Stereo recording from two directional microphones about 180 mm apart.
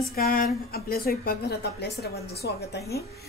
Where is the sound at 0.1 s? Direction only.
55° left (ahead or behind).